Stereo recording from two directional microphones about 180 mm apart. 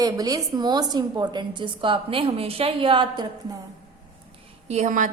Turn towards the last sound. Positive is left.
turn(degrees=-45)  # may be behind; listen again after turning